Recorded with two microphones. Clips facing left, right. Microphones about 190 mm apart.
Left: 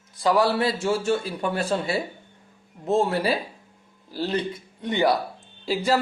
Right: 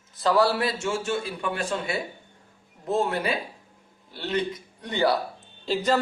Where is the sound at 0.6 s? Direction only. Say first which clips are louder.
Left 4 dB; 30° left (ahead or behind).